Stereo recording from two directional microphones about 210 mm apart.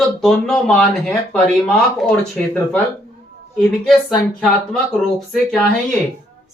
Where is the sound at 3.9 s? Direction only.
Centre (ahead or behind).